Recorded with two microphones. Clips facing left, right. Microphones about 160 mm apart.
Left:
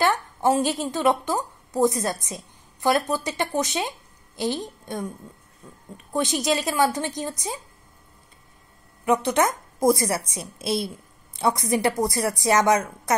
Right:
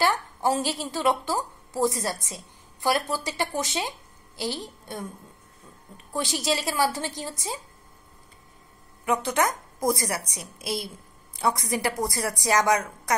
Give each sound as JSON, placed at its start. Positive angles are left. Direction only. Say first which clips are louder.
{"t": 0.0, "sound": "a woman's voice", "louder": "left 3 dB", "side_deg": 20}
{"t": 6.1, "sound": "a woman's voice", "louder": "left 4 dB", "side_deg": 20}
{"t": 9.0, "sound": "a woman's voice", "louder": "left 4 dB", "side_deg": 20}